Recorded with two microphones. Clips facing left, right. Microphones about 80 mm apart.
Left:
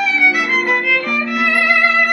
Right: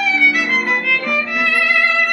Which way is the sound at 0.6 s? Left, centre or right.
Centre.